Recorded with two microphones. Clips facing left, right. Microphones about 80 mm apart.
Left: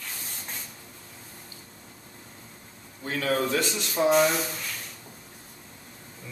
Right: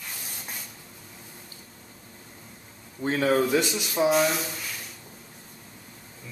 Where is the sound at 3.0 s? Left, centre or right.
Right.